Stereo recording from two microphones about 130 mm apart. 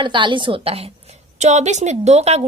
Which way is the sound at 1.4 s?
60° right (ahead or behind).